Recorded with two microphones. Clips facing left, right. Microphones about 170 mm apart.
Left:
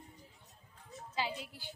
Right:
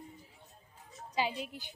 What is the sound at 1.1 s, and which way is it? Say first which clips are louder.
Speech: right 5 dB; 15° right (ahead or behind).